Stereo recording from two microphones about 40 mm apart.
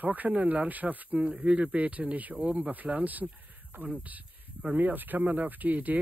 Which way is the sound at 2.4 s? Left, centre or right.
Right.